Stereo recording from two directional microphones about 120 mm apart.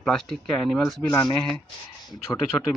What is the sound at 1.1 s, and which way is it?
Speech, 30° left (ahead or behind).